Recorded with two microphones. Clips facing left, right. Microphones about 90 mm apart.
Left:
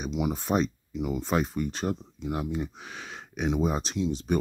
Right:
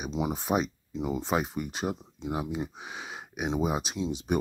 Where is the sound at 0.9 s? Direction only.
25° right (ahead or behind).